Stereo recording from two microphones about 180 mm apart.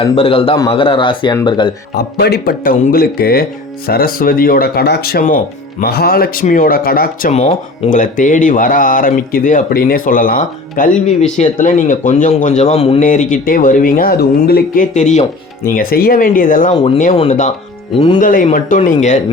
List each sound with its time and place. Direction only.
0.0 s speech: 30° left (ahead or behind)
2.0 s a man's voice: 60° left (ahead or behind); by 13.0 s 35° left (ahead or behind)
13.0 s speech: 45° left (ahead or behind)
14.9 s speech: 40° left (ahead or behind)
15.7 s speech: 55° left (ahead or behind)
16.7 s speech: 30° left (ahead or behind)